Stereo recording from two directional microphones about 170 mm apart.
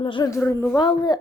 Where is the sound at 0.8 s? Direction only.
25° left (ahead or behind).